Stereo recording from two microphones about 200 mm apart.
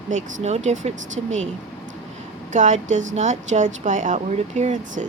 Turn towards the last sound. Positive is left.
turn(degrees=-35)  # may be behind; listen again after turning